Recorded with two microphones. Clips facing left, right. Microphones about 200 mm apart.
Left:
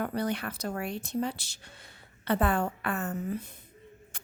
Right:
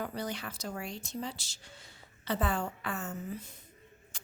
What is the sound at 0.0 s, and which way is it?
Speech, 60° left (ahead or behind).